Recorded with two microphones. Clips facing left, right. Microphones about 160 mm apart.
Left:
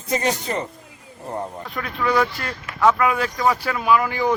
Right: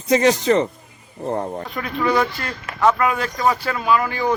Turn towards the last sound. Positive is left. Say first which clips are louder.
# even
turn(degrees=10)  # may be behind; listen again after turning